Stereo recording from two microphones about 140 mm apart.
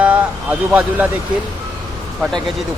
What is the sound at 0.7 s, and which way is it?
Speech, 10° right (ahead or behind).